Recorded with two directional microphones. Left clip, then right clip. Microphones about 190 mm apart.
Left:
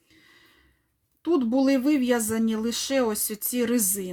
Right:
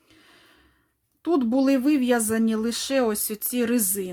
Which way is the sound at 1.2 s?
15° right (ahead or behind).